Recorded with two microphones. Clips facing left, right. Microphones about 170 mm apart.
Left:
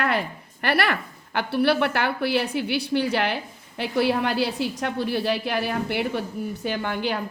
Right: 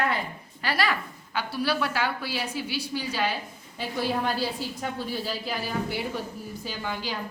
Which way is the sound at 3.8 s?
75° left (ahead or behind).